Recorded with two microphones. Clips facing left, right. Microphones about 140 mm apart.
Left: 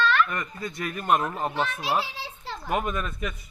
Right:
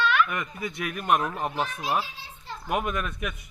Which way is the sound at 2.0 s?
85° left.